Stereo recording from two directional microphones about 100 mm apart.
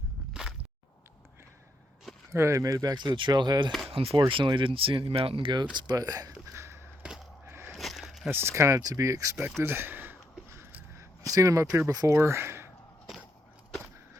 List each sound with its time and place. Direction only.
2.3 s speech: 30° right (ahead or behind); by 3.7 s 45° right (ahead or behind)
3.8 s speech: 70° right (ahead or behind)
4.3 s speech: 55° right (ahead or behind)
5.7 s speech: 45° right (ahead or behind)
6.5 s a sound: 25° right (ahead or behind)
7.7 s a sound: centre (ahead or behind)
8.3 s speech: 25° right (ahead or behind)
9.6 s a sound: 25° right (ahead or behind)
11.2 s speech: 35° right (ahead or behind)
12.1 s speech: 25° right (ahead or behind)